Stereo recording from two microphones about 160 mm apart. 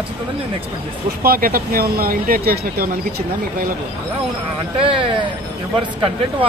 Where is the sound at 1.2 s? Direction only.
65° right (ahead or behind).